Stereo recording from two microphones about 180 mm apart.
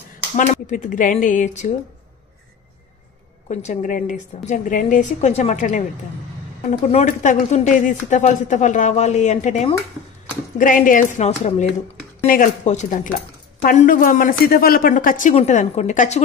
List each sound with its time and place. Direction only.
0.4 s a woman's voice: 45° left (ahead or behind)
3.4 s a woman's voice: 40° left (ahead or behind)